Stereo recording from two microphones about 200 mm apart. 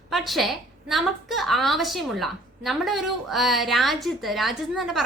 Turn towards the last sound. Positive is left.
turn(degrees=0)  # may be behind; listen again after turning